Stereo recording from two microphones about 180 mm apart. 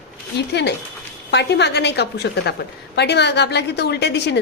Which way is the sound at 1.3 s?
70° left (ahead or behind).